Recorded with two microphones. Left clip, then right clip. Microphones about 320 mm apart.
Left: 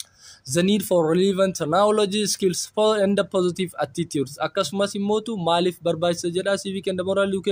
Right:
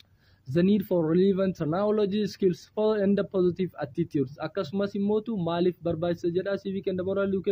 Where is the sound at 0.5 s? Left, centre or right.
Centre.